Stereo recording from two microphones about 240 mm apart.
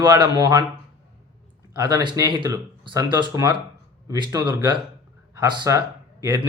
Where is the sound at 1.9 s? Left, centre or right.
Centre.